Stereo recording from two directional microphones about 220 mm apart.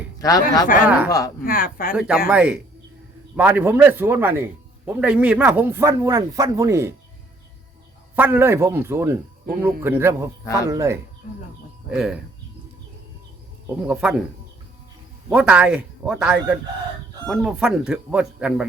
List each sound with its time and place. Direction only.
0.2 s speech: 15° left (ahead or behind)
1.5 s speech: 40° left (ahead or behind)
2.0 s speech: 5° right (ahead or behind)
8.1 s speech: 10° right (ahead or behind)
10.4 s speech: 15° left (ahead or behind)
10.7 s speech: 15° right (ahead or behind)
11.9 s speech: 5° right (ahead or behind)
13.8 s speech: 5° right (ahead or behind)
15.3 s speech: 5° right (ahead or behind)